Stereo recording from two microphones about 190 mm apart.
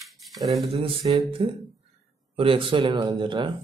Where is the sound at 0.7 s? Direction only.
30° right (ahead or behind).